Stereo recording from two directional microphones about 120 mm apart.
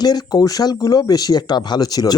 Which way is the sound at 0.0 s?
35° left (ahead or behind).